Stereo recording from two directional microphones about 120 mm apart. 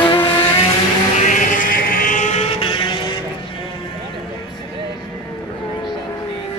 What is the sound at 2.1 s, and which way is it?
Vehicle, 80° left.